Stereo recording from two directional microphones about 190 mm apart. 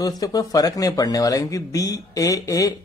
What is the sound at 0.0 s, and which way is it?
Speech, 20° left (ahead or behind).